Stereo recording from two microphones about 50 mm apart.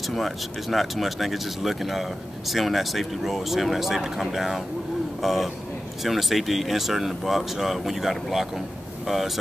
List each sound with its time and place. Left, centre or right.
0.0 s speech: centre